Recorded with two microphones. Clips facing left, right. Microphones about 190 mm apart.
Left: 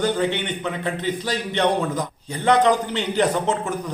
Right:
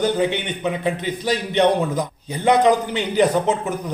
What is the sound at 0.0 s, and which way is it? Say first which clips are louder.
A man's voice: right 2 dB; 15° right (ahead or behind).